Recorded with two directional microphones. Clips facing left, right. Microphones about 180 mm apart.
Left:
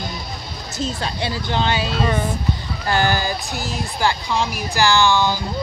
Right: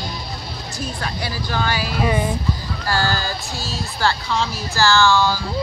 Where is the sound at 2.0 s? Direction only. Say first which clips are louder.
Right 4 dB; 10° right (ahead or behind).